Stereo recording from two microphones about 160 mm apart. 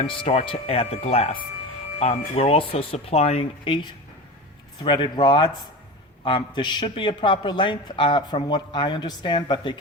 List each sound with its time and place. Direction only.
0.1 s a man's voice: 35° left (ahead or behind)